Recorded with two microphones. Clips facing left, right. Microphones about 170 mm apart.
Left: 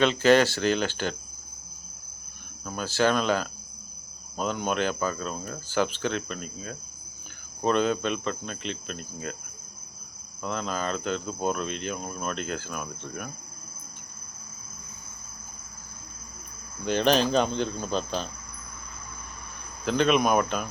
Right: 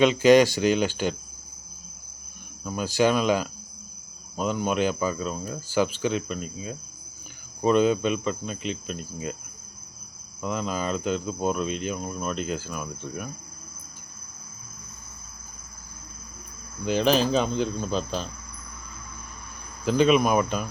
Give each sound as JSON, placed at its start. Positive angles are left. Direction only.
{"t": 0.0, "sound": "speech", "side_deg": -10}
{"t": 2.6, "sound": "speech", "side_deg": -10}
{"t": 10.4, "sound": "speech", "side_deg": -5}
{"t": 16.8, "sound": "speech", "side_deg": 0}
{"t": 19.8, "sound": "speech", "side_deg": -5}